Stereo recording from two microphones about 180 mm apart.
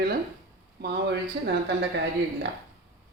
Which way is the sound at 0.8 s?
70° right (ahead or behind).